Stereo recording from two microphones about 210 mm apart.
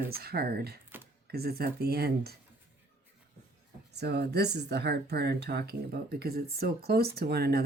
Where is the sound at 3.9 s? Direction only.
50° right (ahead or behind).